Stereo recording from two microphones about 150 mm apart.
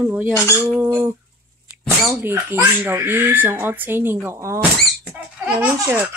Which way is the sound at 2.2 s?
15° right (ahead or behind).